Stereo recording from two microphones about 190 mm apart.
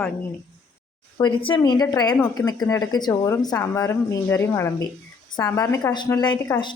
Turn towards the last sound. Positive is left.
turn(degrees=20)  # may be behind; listen again after turning